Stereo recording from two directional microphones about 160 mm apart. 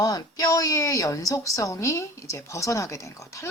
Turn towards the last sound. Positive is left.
turn(degrees=20)  # may be behind; listen again after turning